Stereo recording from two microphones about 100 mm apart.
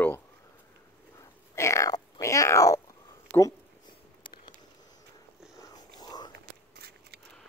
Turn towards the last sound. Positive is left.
turn(degrees=45)  # may be behind; listen again after turning